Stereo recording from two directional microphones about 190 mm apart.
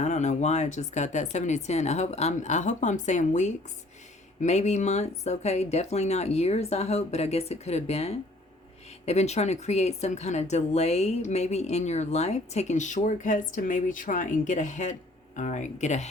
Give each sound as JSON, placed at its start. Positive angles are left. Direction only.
{"t": 0.0, "sound": "speech", "side_deg": 40}